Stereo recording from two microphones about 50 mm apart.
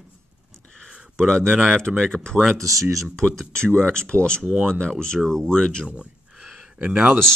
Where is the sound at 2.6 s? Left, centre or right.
Right.